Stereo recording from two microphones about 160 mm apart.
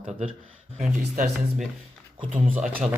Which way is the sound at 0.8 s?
55° right (ahead or behind).